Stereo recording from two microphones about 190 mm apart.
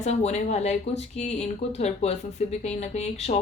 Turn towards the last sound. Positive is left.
turn(degrees=35)  # may be behind; listen again after turning